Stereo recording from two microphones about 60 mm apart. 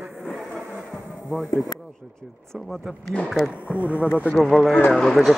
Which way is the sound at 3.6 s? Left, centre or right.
Right.